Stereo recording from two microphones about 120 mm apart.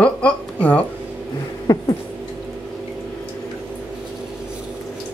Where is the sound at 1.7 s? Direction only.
30° left (ahead or behind).